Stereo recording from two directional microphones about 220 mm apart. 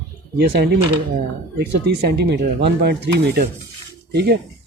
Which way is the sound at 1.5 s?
45° right (ahead or behind).